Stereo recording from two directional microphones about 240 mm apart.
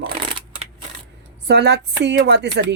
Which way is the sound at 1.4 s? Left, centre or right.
Right.